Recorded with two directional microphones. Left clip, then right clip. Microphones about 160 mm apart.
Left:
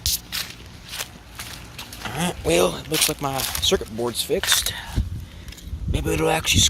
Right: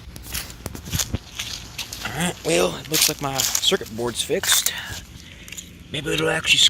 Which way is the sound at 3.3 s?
15° left (ahead or behind).